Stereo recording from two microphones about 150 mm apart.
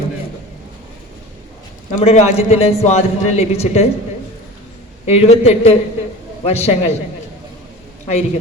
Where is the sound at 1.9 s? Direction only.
50° left (ahead or behind).